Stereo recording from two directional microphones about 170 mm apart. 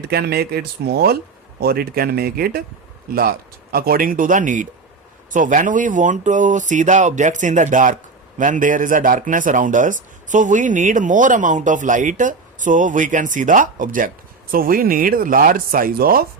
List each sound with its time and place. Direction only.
0.1 s speech: 70° right (ahead or behind)